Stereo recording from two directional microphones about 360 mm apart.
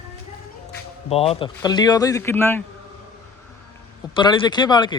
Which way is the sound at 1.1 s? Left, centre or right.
Centre.